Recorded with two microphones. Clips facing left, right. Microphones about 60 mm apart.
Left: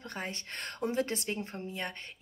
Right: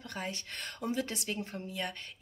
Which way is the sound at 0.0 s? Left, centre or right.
Left.